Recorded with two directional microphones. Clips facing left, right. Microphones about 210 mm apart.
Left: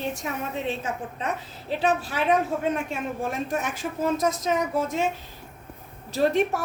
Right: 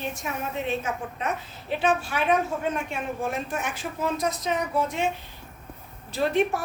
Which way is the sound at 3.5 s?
40° left (ahead or behind).